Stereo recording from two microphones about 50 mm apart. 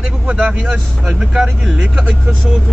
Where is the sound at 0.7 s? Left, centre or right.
Centre.